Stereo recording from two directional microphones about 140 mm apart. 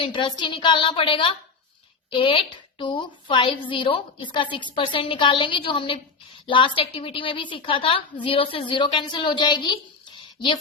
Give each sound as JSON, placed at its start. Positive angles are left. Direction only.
{"t": 0.0, "sound": "a woman's voice", "side_deg": 35}